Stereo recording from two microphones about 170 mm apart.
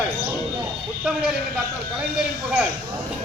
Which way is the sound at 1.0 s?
5° right (ahead or behind).